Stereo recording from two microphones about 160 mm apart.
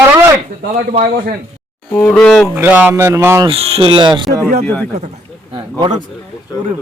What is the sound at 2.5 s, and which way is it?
Speech, 10° right (ahead or behind).